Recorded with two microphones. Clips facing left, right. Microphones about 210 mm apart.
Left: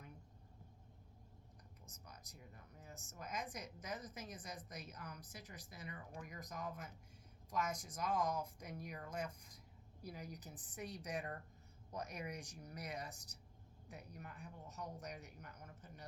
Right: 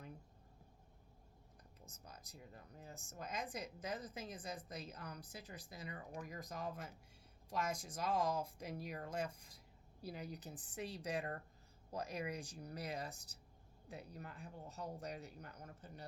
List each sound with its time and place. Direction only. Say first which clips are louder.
1.8 s speech: right 3 dB; 30° right (ahead or behind)